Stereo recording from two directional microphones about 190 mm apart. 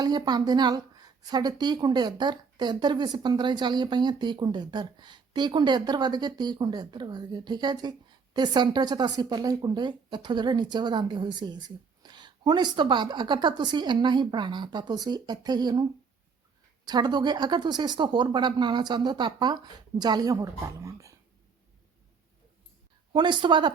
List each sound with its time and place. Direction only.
0.0 s a woman's voice: 20° right (ahead or behind)
23.1 s a woman's voice: 25° right (ahead or behind)